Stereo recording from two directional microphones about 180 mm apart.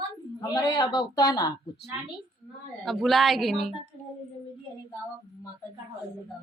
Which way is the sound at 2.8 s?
Centre (ahead or behind).